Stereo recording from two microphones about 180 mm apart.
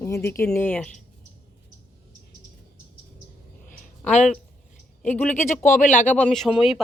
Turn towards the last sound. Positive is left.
turn(degrees=0)  # may be behind; listen again after turning